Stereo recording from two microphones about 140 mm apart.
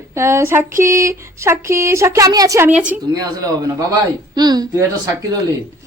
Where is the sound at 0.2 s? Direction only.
20° right (ahead or behind).